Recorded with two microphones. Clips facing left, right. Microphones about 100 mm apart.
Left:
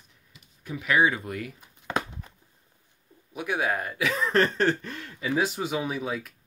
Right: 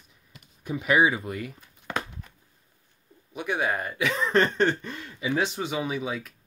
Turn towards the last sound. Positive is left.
turn(degrees=0)  # may be behind; listen again after turning